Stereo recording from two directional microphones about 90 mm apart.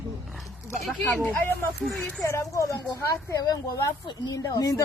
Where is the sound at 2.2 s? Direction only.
35° left (ahead or behind).